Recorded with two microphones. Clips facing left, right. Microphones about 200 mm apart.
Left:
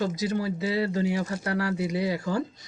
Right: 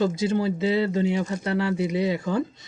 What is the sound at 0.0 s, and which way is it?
Speech, 25° right (ahead or behind).